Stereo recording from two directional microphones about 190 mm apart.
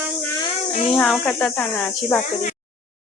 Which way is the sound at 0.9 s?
Centre (ahead or behind).